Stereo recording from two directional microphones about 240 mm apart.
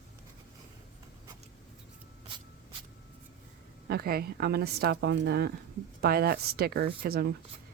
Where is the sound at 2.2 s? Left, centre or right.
Right.